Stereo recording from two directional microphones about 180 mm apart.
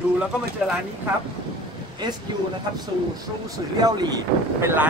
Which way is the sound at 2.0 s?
25° right (ahead or behind).